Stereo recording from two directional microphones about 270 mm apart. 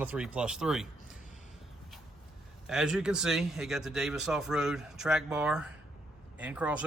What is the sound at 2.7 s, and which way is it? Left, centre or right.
Speech, centre.